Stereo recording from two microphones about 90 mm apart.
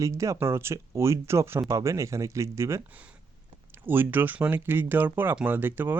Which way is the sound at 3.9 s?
20° right (ahead or behind).